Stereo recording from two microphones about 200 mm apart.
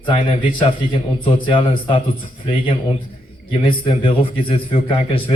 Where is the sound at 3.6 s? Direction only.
25° left (ahead or behind).